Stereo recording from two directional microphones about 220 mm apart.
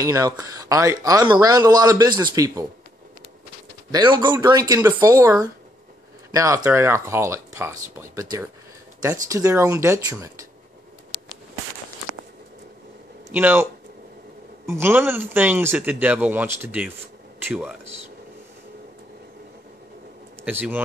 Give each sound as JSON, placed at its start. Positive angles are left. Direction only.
{"t": 0.0, "sound": "speech", "side_deg": -15}
{"t": 3.9, "sound": "speech", "side_deg": -20}
{"t": 13.3, "sound": "speech", "side_deg": -10}
{"t": 14.7, "sound": "speech", "side_deg": -10}
{"t": 20.4, "sound": "speech", "side_deg": -10}